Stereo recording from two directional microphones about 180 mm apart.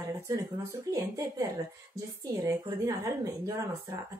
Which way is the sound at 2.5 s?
15° right (ahead or behind).